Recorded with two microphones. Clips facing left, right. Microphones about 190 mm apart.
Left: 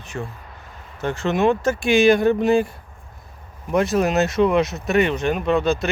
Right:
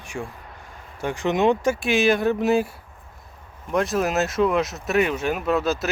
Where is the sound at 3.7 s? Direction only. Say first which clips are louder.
Left 3 dB; centre (ahead or behind).